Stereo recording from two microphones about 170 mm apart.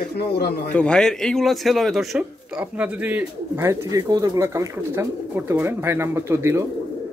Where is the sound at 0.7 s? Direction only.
5° left (ahead or behind).